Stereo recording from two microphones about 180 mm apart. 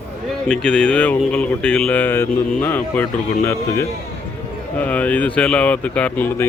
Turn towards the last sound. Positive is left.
turn(degrees=10)  # may be behind; listen again after turning